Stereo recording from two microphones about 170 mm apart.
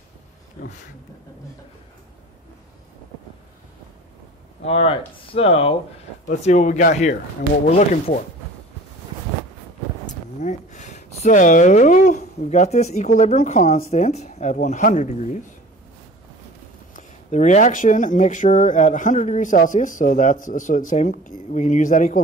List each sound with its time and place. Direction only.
4.6 s speech: 35° left (ahead or behind)
10.0 s speech: 45° left (ahead or behind)
16.9 s speech: 45° left (ahead or behind)